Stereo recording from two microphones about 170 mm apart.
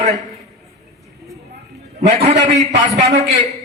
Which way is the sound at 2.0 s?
35° right (ahead or behind).